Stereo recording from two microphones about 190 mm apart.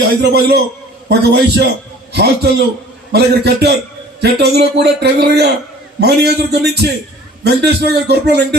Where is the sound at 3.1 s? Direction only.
60° right (ahead or behind).